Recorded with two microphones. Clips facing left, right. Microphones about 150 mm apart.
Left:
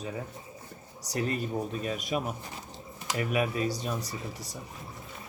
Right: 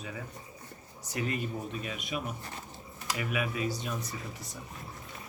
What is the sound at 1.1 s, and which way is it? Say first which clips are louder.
A man's voice: left 3 dB; 40° left (ahead or behind).